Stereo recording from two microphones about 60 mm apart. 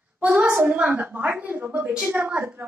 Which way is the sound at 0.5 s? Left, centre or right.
Right.